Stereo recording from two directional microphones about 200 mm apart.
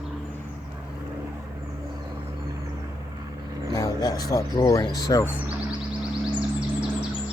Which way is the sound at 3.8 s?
15° left (ahead or behind).